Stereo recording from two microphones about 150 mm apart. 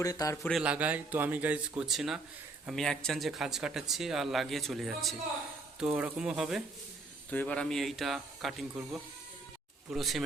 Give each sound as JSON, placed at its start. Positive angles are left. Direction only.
{"t": 0.0, "sound": "speech", "side_deg": 25}
{"t": 0.4, "sound": "speech", "side_deg": -5}
{"t": 7.3, "sound": "speech", "side_deg": 10}